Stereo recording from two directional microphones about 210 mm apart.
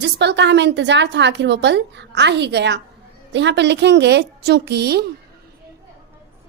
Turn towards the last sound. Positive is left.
turn(degrees=-50)  # may be behind; listen again after turning